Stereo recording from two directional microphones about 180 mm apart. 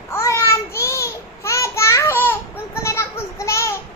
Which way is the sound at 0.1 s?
15° left (ahead or behind).